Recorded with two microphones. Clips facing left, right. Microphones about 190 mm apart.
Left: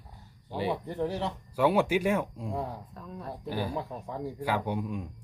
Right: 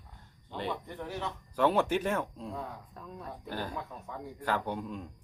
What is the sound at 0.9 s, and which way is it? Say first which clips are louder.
Speech: left 7 dB; 35° left (ahead or behind).